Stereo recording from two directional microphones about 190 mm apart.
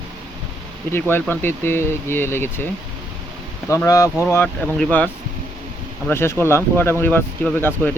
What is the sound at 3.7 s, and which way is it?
Speech, 15° left (ahead or behind).